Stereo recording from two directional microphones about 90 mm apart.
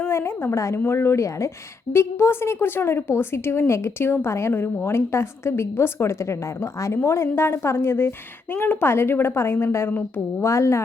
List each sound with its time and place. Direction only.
0.0 s a woman's voice: 30° left (ahead or behind)